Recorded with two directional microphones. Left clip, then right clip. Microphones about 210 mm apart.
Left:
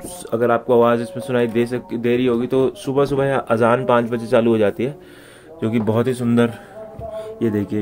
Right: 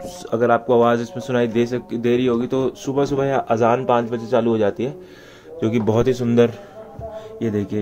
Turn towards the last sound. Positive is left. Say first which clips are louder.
# left 2 dB
turn(degrees=0)  # may be behind; listen again after turning